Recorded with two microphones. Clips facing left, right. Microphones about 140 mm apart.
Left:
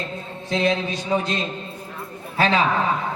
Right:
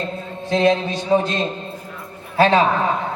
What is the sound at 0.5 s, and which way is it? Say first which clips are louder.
A man's voice: right 5 dB; 35° right (ahead or behind).